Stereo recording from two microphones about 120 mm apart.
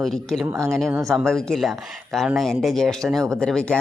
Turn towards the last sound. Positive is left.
turn(degrees=5)  # may be behind; listen again after turning